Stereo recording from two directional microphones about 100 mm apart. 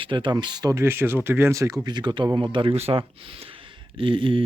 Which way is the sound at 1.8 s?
50° right (ahead or behind).